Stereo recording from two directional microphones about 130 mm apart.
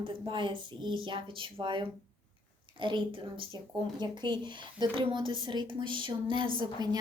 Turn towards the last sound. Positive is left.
turn(degrees=-35)  # may be behind; listen again after turning